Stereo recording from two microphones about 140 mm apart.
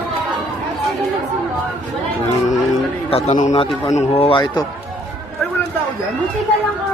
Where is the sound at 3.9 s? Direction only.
45° left (ahead or behind).